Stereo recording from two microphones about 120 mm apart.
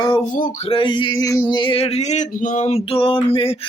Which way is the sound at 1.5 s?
40° left (ahead or behind).